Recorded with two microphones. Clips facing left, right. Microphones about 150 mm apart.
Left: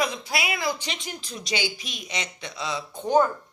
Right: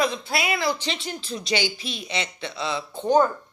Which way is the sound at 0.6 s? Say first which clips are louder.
Right 3 dB; 30° right (ahead or behind).